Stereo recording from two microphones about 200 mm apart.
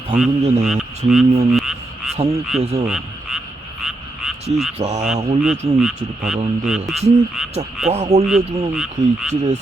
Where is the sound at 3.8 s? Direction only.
5° right (ahead or behind).